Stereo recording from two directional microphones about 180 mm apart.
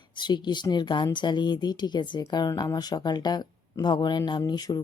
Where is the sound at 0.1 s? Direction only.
25° left (ahead or behind).